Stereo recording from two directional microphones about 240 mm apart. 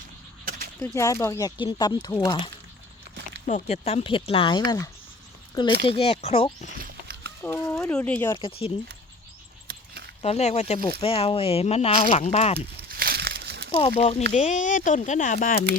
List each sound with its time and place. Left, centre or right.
0.8 s speech: centre
3.4 s speech: left
5.8 s speech: left
6.7 s a sound: right
7.4 s speech: centre
8.4 s speech: left
9.6 s a sound: right
10.2 s speech: left
12.5 s a sound: right
13.7 s speech: left